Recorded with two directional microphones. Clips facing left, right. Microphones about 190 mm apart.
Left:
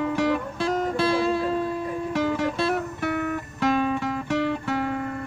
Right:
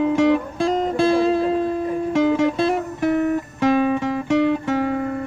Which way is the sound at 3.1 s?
30° right (ahead or behind).